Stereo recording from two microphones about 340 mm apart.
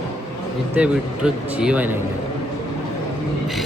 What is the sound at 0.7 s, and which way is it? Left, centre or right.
Speech, centre.